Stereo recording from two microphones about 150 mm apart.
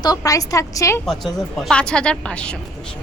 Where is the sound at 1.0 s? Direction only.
Centre (ahead or behind).